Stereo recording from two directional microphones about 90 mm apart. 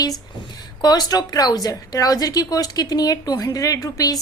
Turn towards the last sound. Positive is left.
turn(degrees=40)  # may be behind; listen again after turning